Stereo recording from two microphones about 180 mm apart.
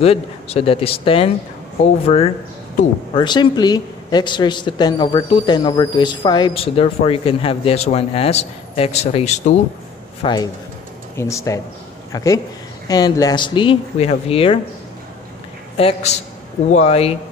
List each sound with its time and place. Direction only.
0.0 s a man's voice: 35° left (ahead or behind)
10.2 s a man's voice: 25° left (ahead or behind)
15.8 s a man's voice: 30° left (ahead or behind)